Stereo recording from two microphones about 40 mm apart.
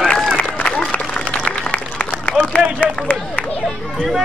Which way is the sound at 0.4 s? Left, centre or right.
Left.